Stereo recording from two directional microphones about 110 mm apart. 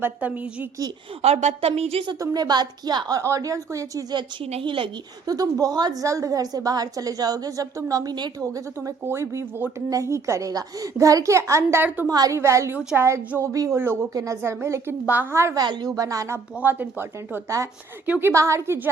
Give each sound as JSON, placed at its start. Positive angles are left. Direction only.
{"t": 0.0, "sound": "speech", "side_deg": -15}
{"t": 1.2, "sound": "a woman's voice", "side_deg": -80}
{"t": 2.1, "sound": "a woman's voice", "side_deg": -35}
{"t": 4.6, "sound": "speech", "side_deg": -50}
{"t": 5.2, "sound": "a woman's voice", "side_deg": -35}
{"t": 12.0, "sound": "a woman's voice", "side_deg": -35}
{"t": 15.5, "sound": "a woman's voice", "side_deg": -40}
{"t": 16.6, "sound": "a woman's voice", "side_deg": -15}